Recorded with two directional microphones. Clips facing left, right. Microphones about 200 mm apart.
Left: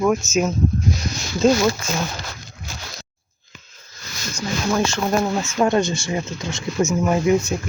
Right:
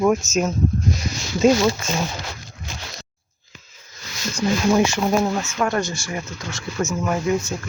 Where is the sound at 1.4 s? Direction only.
10° right (ahead or behind).